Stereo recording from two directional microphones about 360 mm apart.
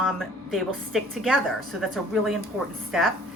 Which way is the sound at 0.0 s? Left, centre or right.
Centre.